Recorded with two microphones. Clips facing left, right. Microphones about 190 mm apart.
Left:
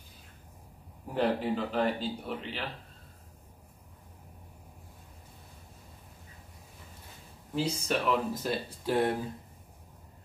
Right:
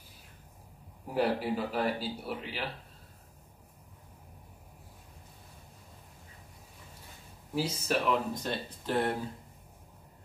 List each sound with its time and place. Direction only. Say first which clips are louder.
1.1 s a man's voice: left 1 dB; 10° right (ahead or behind)
7.5 s speech: even; 5° right (ahead or behind); by 9.1 s 15° left (ahead or behind)